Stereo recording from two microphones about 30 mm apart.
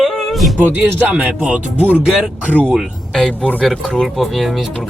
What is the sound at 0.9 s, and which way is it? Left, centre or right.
Speech, right.